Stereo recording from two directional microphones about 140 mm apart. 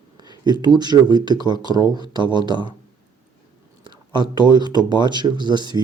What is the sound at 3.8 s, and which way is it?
Speech, 35° right (ahead or behind).